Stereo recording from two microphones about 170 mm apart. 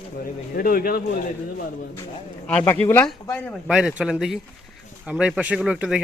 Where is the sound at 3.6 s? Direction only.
5° right (ahead or behind).